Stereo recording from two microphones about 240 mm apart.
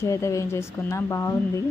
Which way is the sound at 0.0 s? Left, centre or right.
Centre.